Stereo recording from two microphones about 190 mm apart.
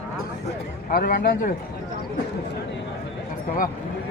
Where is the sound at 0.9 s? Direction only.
50° left (ahead or behind).